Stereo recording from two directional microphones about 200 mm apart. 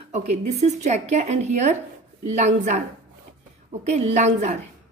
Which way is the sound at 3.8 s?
35° right (ahead or behind).